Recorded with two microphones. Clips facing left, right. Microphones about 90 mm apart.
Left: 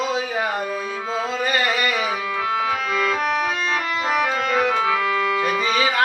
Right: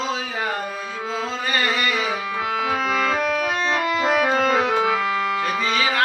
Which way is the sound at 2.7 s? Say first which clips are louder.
Right 1 dB; 35° right (ahead or behind).